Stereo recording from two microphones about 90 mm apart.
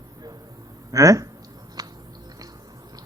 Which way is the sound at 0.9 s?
35° right (ahead or behind).